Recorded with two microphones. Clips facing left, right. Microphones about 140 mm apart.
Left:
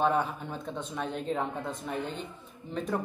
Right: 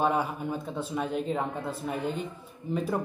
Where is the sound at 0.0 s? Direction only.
5° right (ahead or behind).